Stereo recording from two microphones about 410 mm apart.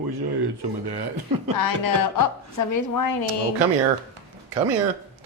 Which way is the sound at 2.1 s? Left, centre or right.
Left.